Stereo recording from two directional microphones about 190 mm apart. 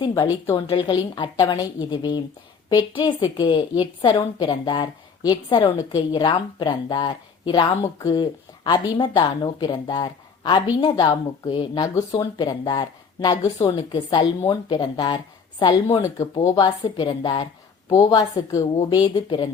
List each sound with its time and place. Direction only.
0.0 s a woman's voice: 20° left (ahead or behind)